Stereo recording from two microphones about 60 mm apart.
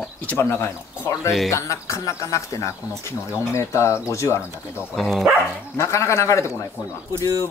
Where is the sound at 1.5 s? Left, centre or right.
Left.